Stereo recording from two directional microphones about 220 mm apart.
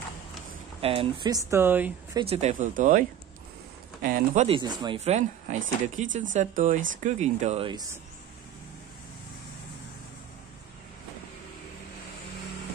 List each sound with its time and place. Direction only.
0.7 s speech: 25° right (ahead or behind); by 1.9 s 10° right (ahead or behind)
2.1 s speech: 25° right (ahead or behind)
4.0 s speech: 40° right (ahead or behind)
4.5 s speech: 20° right (ahead or behind)